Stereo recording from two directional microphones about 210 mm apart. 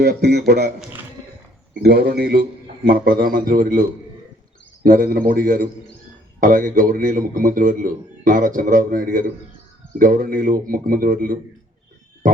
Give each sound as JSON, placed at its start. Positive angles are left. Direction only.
{"t": 0.0, "sound": "a man's voice", "side_deg": -50}
{"t": 1.8, "sound": "a man's voice", "side_deg": -50}
{"t": 12.2, "sound": "frog", "side_deg": -40}